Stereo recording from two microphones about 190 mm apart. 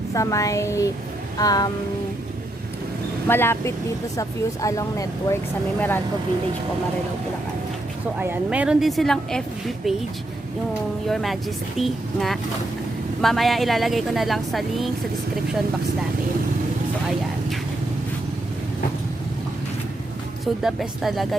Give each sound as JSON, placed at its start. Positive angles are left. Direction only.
{"t": 0.1, "sound": "speech", "side_deg": 15}
{"t": 1.4, "sound": "music", "side_deg": 20}
{"t": 3.2, "sound": "speech", "side_deg": 10}
{"t": 8.2, "sound": "a woman's voice", "side_deg": -10}
{"t": 11.0, "sound": "a woman's voice", "side_deg": 0}
{"t": 20.4, "sound": "a woman's voice", "side_deg": 0}